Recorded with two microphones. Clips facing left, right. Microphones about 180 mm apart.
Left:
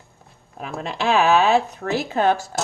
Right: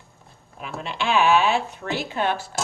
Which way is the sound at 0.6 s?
40° left (ahead or behind).